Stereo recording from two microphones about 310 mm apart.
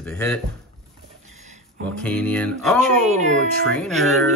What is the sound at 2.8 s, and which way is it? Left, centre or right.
Speech, right.